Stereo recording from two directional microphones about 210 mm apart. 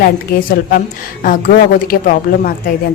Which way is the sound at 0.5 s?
45° left (ahead or behind).